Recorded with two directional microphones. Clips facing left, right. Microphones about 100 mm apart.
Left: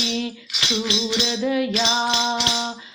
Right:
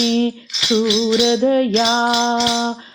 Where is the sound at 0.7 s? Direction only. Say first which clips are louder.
Right 9 dB; 25° right (ahead or behind).